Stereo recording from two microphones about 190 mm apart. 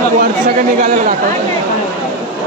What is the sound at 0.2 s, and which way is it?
Speech, 45° right (ahead or behind).